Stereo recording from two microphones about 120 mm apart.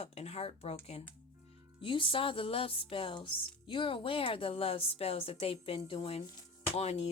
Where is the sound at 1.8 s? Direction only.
45° left (ahead or behind).